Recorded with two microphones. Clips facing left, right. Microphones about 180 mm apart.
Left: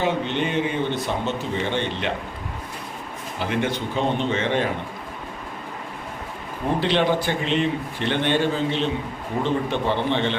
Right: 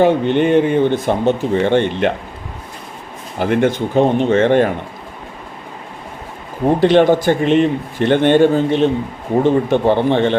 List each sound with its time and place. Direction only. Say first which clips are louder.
0.0 s a man's voice: right 10 dB; 55° right (ahead or behind)
3.3 s a man's voice: right 9 dB; 50° right (ahead or behind)
6.7 s a man's voice: right 10 dB; 50° right (ahead or behind)